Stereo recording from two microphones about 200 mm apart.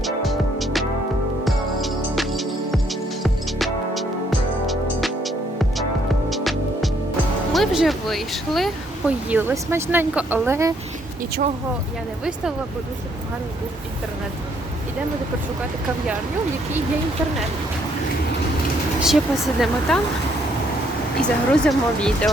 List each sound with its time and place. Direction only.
0.0 s music: centre (ahead or behind)
7.5 s speech: centre (ahead or behind)
11.2 s speech: 45° right (ahead or behind)
19.0 s speech: centre (ahead or behind)
21.2 s speech: 5° left (ahead or behind)